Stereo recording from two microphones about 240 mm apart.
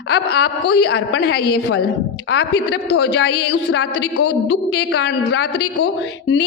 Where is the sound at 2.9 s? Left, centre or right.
Left.